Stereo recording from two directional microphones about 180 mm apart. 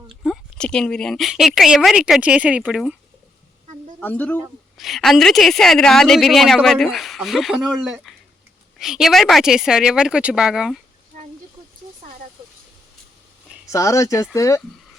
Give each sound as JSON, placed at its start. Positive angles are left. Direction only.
{"t": 0.2, "sound": "a woman's voice", "side_deg": 5}
{"t": 4.0, "sound": "a woman's voice", "side_deg": 10}
{"t": 13.7, "sound": "speech", "side_deg": 15}